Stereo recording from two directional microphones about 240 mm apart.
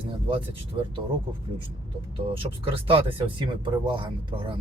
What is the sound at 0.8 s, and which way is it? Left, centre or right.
Speech, right.